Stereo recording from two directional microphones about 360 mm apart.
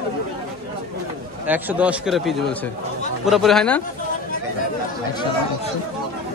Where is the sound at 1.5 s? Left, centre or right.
Centre.